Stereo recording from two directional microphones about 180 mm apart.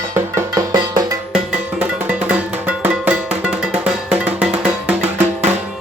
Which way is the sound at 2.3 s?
10° right (ahead or behind).